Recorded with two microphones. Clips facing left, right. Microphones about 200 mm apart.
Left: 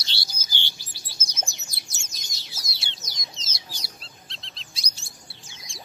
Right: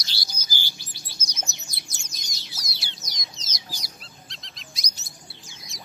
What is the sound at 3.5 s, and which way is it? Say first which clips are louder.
Chirp: right 1 dB; 30° left (ahead or behind).